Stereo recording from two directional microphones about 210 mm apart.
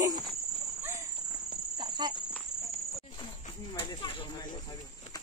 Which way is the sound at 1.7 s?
20° right (ahead or behind).